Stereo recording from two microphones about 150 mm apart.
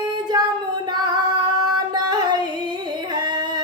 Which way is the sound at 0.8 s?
30° right (ahead or behind).